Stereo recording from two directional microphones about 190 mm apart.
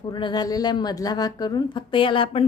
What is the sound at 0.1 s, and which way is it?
A woman's voice, 25° left (ahead or behind).